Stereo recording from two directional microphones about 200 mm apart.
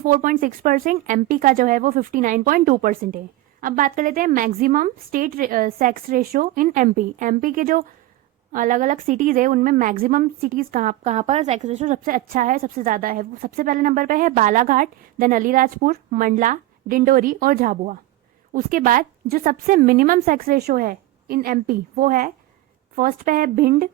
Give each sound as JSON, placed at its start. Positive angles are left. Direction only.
{"t": 0.0, "sound": "speech", "side_deg": -45}